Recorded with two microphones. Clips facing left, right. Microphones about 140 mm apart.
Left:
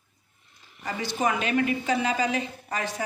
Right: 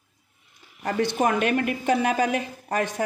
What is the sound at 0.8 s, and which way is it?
A woman's voice, 60° right (ahead or behind).